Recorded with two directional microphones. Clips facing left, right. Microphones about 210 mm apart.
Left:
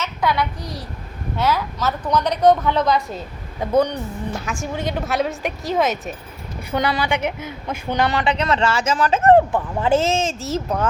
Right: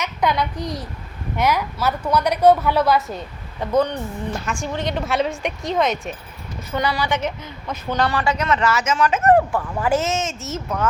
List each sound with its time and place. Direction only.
0.0 s a child's voice: 20° right (ahead or behind)
3.6 s a woman's voice: 10° left (ahead or behind)
6.7 s a woman's voice: 15° left (ahead or behind); by 10.8 s 35° left (ahead or behind)